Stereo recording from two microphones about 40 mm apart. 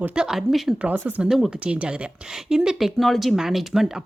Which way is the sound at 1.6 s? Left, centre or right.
Right.